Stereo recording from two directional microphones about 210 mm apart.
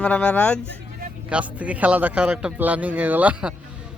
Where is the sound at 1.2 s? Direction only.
5° right (ahead or behind).